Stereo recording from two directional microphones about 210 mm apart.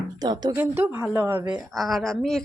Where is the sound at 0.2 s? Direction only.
20° right (ahead or behind).